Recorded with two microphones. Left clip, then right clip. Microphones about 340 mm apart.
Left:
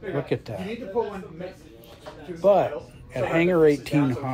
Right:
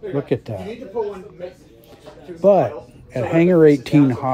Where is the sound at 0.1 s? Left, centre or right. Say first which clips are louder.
Right 5 dB; right.